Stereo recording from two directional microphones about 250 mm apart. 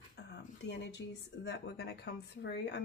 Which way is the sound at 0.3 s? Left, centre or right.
Left.